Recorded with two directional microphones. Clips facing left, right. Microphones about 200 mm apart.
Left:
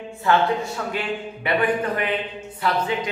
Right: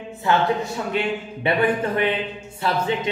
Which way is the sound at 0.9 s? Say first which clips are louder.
Right 3 dB; 25° right (ahead or behind).